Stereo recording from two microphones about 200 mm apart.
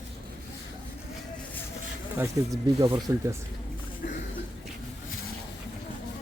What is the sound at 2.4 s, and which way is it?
Speech, 15° right (ahead or behind).